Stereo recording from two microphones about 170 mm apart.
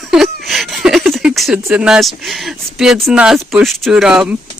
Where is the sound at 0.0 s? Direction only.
Centre (ahead or behind).